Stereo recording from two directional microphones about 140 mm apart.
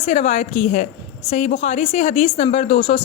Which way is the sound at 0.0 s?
50° left (ahead or behind).